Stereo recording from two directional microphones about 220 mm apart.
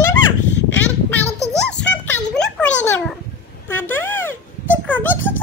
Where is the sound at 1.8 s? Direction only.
5° left (ahead or behind).